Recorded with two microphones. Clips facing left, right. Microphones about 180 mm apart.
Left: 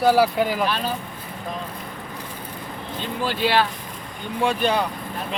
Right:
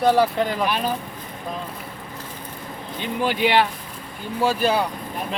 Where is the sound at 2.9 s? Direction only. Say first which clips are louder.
Right 3 dB; 15° right (ahead or behind).